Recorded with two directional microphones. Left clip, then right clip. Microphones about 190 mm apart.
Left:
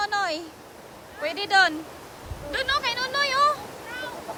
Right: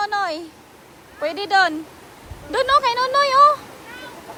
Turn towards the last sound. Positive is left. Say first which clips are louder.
# right 8 dB
turn(degrees=-5)  # may be behind; listen again after turning